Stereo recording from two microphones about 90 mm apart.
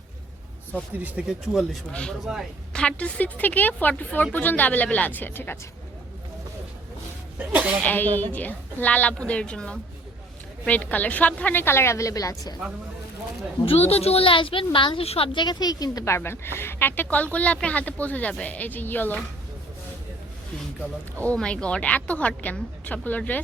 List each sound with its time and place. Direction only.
0.9 s speech: 15° right (ahead or behind)
1.9 s a woman's voice: 10° left (ahead or behind)
2.2 s a woman's voice: 5° right (ahead or behind)
2.7 s speech: 10° left (ahead or behind)
7.3 s sneeze: 15° right (ahead or behind)
7.9 s a woman's voice: 20° left (ahead or behind); by 12.5 s 40° left (ahead or behind)
13.7 s a woman's voice: 90° left; by 16.0 s 45° left (ahead or behind)
16.0 s speech: 30° left (ahead or behind)
21.2 s a woman's voice: 15° left (ahead or behind)